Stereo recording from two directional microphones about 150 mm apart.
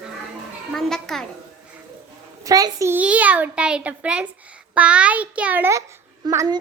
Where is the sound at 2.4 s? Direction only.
25° right (ahead or behind).